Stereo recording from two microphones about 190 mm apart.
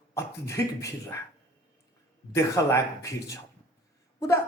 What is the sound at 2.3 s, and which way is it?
Speech, 15° left (ahead or behind).